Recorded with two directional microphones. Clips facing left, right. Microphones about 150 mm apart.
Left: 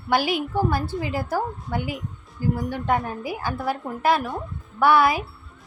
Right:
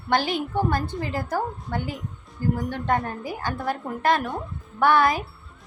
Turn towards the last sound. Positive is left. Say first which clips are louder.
# left 1 dB
turn(degrees=10)  # may be behind; listen again after turning